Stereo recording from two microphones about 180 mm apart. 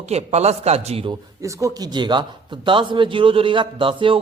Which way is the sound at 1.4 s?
20° right (ahead or behind).